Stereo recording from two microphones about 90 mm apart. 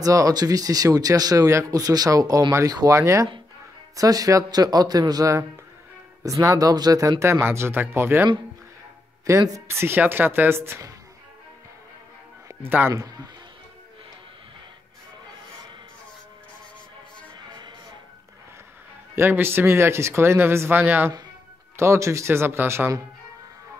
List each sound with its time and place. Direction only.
0.0 s speech: 40° right (ahead or behind)
9.3 s speech: 35° right (ahead or behind)
12.6 s speech: 20° right (ahead or behind)
12.9 s speech: 40° right (ahead or behind)
19.1 s speech: 25° right (ahead or behind)